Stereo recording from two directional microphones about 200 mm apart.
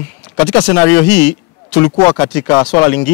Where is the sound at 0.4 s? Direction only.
10° left (ahead or behind).